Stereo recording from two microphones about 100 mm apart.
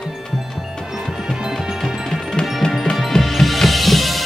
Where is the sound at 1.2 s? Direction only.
Centre (ahead or behind).